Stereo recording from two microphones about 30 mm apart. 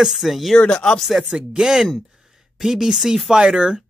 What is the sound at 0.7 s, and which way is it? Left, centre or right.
Speech, left.